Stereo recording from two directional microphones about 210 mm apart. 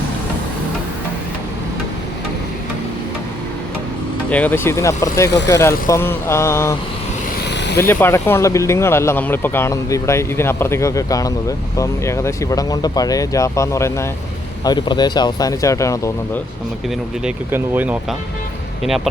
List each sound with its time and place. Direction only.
4.3 s speech: 5° left (ahead or behind)
7.4 s vehicle: 55° left (ahead or behind)
7.8 s speech: 10° left (ahead or behind)
17.2 s speech: 10° right (ahead or behind)